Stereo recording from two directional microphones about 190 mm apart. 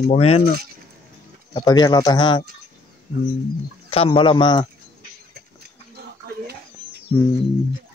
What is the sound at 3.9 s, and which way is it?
Speech, 30° left (ahead or behind).